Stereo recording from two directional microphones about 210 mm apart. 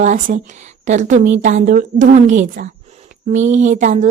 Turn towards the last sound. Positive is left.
turn(degrees=-35)  # may be behind; listen again after turning